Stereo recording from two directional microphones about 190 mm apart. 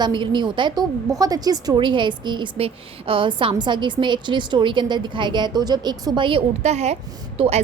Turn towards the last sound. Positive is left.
turn(degrees=-35)  # may be behind; listen again after turning